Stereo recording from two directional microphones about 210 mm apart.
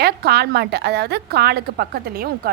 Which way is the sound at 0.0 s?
50° right (ahead or behind).